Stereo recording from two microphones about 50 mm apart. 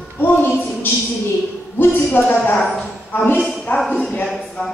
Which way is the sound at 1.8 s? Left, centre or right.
Left.